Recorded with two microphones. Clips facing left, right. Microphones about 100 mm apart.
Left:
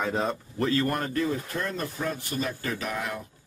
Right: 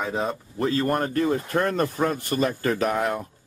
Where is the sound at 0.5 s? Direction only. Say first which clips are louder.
Right 3 dB; 35° right (ahead or behind).